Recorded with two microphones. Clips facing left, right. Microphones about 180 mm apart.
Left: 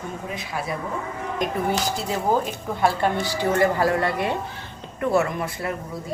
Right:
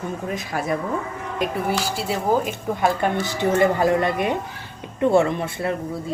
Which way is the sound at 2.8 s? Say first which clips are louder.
Even; 20° right (ahead or behind).